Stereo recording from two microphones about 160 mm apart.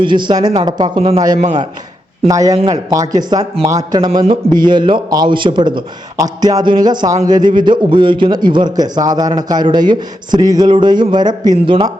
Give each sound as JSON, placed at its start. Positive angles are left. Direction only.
{"t": 0.0, "sound": "a man's voice", "side_deg": -30}
{"t": 2.2, "sound": "a man's voice", "side_deg": -20}